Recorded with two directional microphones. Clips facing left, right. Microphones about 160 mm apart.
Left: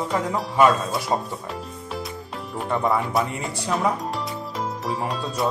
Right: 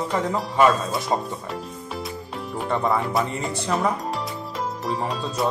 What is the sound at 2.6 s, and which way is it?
Speech, centre (ahead or behind).